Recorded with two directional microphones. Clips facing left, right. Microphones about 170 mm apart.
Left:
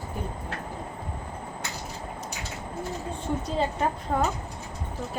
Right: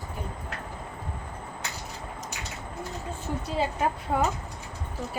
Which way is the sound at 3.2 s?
5° right (ahead or behind).